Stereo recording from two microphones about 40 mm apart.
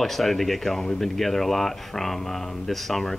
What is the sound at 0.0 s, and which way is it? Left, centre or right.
Speech, centre.